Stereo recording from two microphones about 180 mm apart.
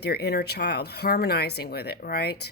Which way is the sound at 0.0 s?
65° left (ahead or behind).